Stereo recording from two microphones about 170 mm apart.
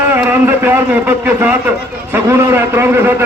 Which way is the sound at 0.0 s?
10° right (ahead or behind).